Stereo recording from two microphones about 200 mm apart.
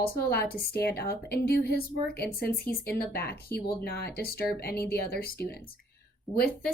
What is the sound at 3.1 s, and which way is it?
Speech, 50° left (ahead or behind).